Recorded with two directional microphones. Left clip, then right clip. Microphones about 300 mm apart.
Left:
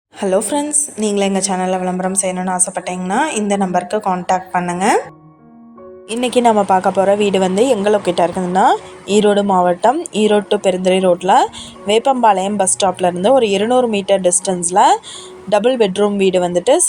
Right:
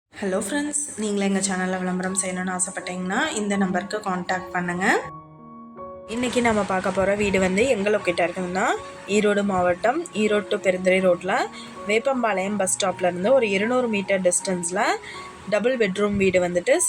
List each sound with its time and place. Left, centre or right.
0.2 s a woman's voice: left
6.1 s a woman's voice: left